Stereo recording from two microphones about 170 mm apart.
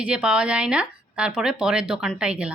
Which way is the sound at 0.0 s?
5° right (ahead or behind).